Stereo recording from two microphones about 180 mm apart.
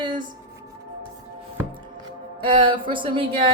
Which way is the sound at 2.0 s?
30° right (ahead or behind).